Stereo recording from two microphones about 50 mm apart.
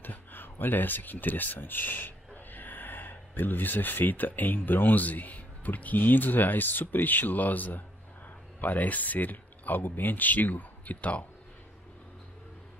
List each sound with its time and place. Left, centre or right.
0.0 s speech: left